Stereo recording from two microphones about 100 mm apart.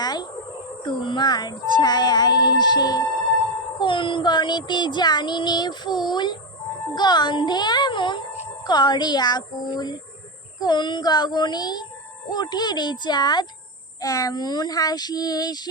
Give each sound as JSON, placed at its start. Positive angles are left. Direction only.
{"t": 0.0, "sound": "a sound", "side_deg": 45}
{"t": 0.9, "sound": "child singing", "side_deg": 50}
{"t": 3.8, "sound": "child singing", "side_deg": 55}
{"t": 14.0, "sound": "speech", "side_deg": 35}